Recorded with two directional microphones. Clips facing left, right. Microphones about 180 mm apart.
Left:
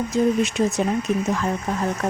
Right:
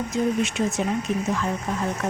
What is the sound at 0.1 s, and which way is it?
Speech, 40° left (ahead or behind).